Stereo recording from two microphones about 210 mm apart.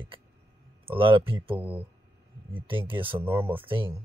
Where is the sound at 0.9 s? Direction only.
25° right (ahead or behind).